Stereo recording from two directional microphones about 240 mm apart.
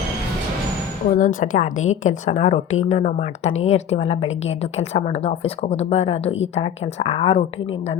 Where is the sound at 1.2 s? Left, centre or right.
Left.